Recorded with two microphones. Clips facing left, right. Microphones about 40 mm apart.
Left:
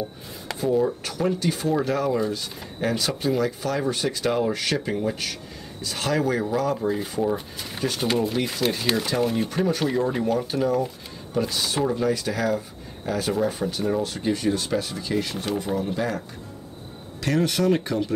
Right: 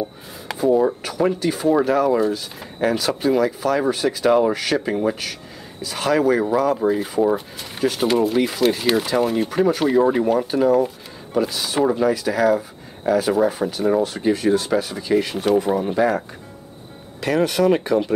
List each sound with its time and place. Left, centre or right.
0.7 s speech: right
1.0 s speech: centre
17.2 s speech: centre